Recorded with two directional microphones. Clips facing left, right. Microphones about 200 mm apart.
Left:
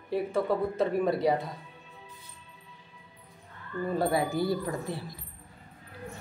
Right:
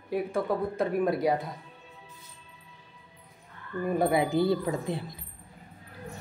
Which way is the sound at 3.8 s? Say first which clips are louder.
Right 2 dB; 15° right (ahead or behind).